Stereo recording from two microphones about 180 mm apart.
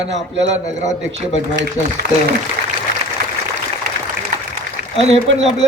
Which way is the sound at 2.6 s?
60° right (ahead or behind).